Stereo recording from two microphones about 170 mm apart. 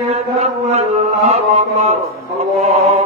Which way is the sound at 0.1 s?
40° right (ahead or behind).